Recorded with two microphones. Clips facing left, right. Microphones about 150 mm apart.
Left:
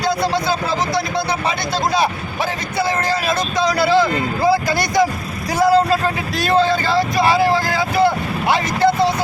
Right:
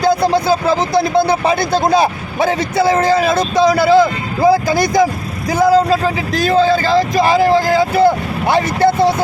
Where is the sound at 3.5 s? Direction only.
50° right (ahead or behind).